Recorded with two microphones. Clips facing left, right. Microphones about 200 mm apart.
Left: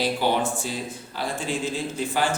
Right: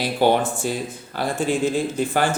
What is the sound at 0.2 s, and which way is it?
Speech, 55° right (ahead or behind).